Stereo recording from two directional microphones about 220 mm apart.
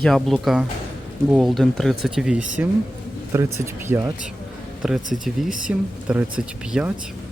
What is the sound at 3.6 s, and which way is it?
Speech, 15° right (ahead or behind).